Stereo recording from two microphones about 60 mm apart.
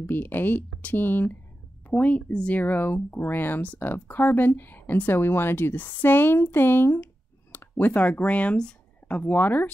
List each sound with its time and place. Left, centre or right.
0.1 s a woman's voice: left
2.6 s a woman's voice: left